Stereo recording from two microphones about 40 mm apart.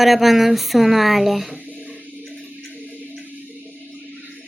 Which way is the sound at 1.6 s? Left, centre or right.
Right.